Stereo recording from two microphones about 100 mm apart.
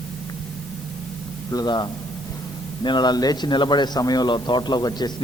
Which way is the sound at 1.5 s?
45° left (ahead or behind).